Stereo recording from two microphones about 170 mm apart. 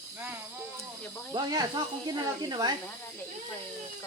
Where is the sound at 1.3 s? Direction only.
25° right (ahead or behind).